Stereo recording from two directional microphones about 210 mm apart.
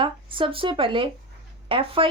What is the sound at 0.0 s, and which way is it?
A woman's voice, 25° right (ahead or behind).